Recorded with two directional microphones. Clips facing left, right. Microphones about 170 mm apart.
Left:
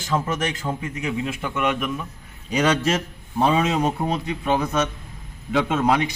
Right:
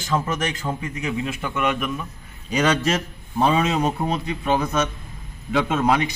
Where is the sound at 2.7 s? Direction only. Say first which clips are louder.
Even; 10° left (ahead or behind).